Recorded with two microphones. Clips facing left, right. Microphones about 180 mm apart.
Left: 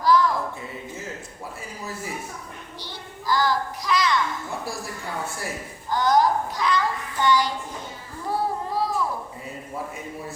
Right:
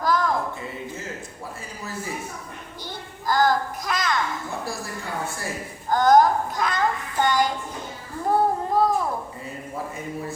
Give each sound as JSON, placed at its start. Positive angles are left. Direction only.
{"t": 0.0, "sound": "a sound", "side_deg": -50}
{"t": 3.2, "sound": "a child's voice", "side_deg": -50}
{"t": 5.9, "sound": "a child's voice", "side_deg": -50}
{"t": 8.3, "sound": "child singing", "side_deg": -50}